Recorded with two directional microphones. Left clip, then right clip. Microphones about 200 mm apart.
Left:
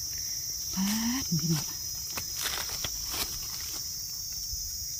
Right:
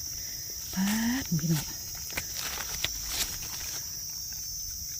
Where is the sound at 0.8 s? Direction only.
20° right (ahead or behind).